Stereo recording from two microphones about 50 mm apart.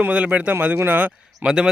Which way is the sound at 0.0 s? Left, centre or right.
Right.